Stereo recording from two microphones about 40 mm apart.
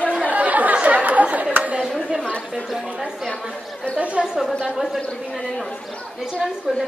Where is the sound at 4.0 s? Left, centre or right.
Right.